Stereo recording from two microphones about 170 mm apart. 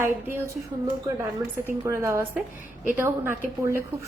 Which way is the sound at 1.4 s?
15° right (ahead or behind).